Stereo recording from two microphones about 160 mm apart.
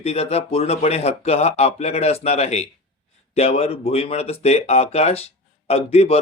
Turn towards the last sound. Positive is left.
turn(degrees=40)  # may be behind; listen again after turning